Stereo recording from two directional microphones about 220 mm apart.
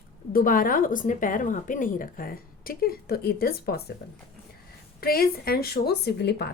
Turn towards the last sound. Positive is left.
turn(degrees=50)  # may be behind; listen again after turning